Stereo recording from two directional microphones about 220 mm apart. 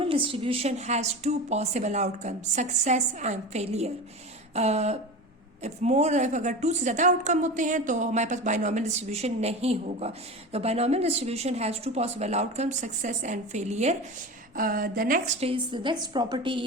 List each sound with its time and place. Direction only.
0.0 s a woman's voice: 25° right (ahead or behind)
15.4 s a woman's voice: 20° right (ahead or behind)